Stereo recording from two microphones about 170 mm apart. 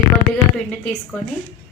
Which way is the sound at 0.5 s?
5° left (ahead or behind).